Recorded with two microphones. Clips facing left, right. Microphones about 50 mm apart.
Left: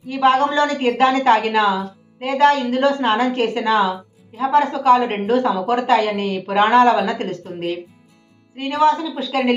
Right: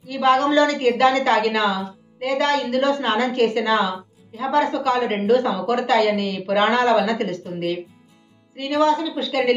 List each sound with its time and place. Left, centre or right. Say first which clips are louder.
0.1 s a woman's voice: left 1 dB; left